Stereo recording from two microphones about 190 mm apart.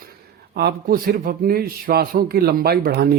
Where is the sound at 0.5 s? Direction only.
55° right (ahead or behind).